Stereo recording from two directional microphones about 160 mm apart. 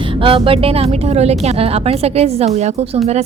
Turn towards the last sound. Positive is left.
turn(degrees=-40)  # may be behind; listen again after turning